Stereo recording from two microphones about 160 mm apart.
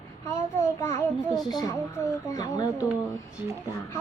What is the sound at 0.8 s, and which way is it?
Speech, 20° left (ahead or behind).